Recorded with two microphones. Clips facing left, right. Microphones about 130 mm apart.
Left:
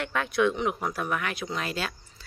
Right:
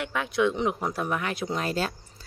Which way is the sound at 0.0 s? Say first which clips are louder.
Even; 15° right (ahead or behind).